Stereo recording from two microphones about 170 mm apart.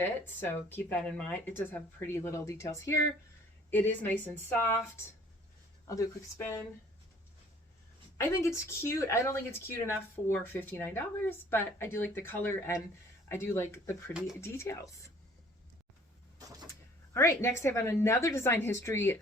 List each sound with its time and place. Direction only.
0.0 s speech: 10° left (ahead or behind)
5.9 s speech: 15° left (ahead or behind)
8.2 s speech: 15° left (ahead or behind)
14.1 s speech: 5° right (ahead or behind)
14.4 s speech: 15° left (ahead or behind)
16.4 s vehicle: 20° right (ahead or behind)
17.2 s speech: 15° left (ahead or behind)